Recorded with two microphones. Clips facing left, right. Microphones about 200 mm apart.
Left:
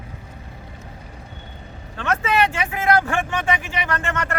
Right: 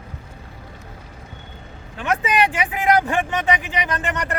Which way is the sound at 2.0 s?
15° right (ahead or behind).